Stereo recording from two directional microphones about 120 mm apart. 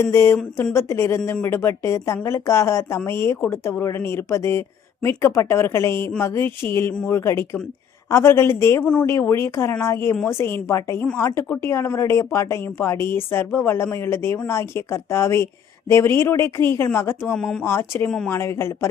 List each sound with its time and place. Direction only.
0.0 s speech: 20° left (ahead or behind)
8.8 s speech: 10° left (ahead or behind)
9.0 s speech: 20° left (ahead or behind)
17.3 s speech: 5° left (ahead or behind)
17.6 s speech: 20° left (ahead or behind)